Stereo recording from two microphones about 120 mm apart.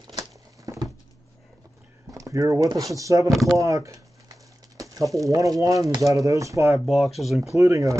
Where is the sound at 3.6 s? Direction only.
25° right (ahead or behind).